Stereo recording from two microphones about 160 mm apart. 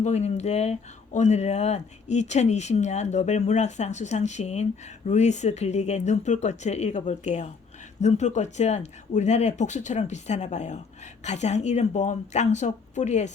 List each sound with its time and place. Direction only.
0.0 s speech: 45° left (ahead or behind)